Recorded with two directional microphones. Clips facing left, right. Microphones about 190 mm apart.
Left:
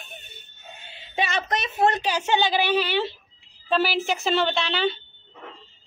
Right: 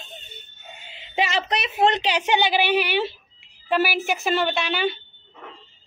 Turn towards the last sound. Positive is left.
turn(degrees=-10)  # may be behind; listen again after turning